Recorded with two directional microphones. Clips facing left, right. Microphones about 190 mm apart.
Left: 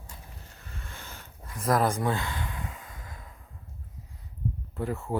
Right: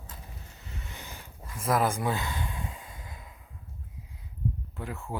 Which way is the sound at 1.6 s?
Centre (ahead or behind).